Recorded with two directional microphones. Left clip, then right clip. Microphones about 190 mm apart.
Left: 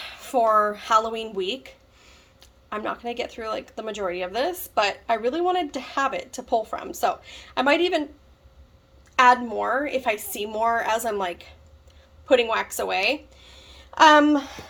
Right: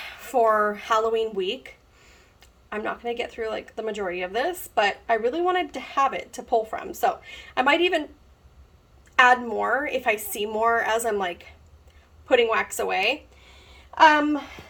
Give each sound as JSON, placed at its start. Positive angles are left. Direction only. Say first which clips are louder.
{"t": 0.0, "sound": "speech", "louder": "even", "side_deg": 5}
{"t": 9.1, "sound": "speech", "louder": "even", "side_deg": 5}